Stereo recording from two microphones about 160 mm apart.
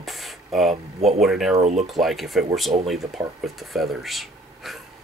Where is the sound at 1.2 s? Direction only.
Centre (ahead or behind).